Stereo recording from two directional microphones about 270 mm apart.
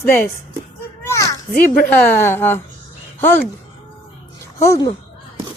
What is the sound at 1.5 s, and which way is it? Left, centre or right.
Speech, left.